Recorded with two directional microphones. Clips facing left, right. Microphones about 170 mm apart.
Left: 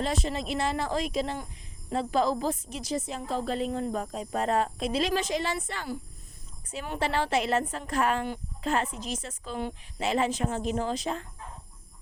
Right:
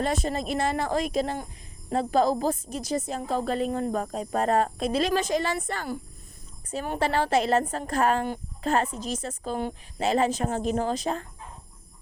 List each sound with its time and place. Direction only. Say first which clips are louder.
0.0 s a woman's voice: right 3 dB; 50° right (ahead or behind)